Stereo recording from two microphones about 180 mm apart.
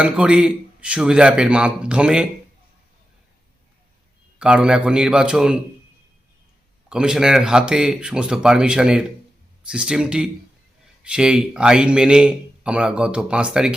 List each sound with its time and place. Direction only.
0.0 s speech: 5° right (ahead or behind)
4.4 s speech: 5° right (ahead or behind)
6.8 s speech: 5° right (ahead or behind)